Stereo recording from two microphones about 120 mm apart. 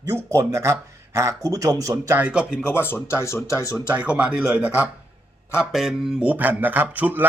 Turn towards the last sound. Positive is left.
turn(degrees=-15)  # may be behind; listen again after turning